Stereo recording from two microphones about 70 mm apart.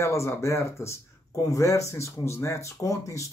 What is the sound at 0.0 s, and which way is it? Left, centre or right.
Speech, left.